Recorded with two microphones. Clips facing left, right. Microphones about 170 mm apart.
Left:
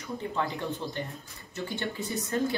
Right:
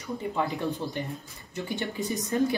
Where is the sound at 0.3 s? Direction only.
15° right (ahead or behind).